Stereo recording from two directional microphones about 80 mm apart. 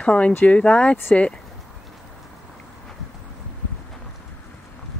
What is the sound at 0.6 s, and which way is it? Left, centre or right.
Speech, centre.